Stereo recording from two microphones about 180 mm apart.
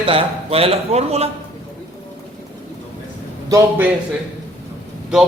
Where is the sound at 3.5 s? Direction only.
10° right (ahead or behind).